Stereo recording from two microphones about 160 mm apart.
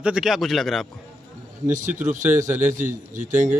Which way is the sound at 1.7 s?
50° right (ahead or behind).